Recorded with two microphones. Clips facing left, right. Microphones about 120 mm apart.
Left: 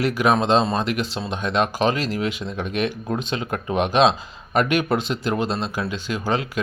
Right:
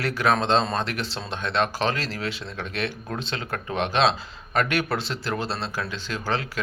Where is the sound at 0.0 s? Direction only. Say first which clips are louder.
Left 4 dB; 15° left (ahead or behind).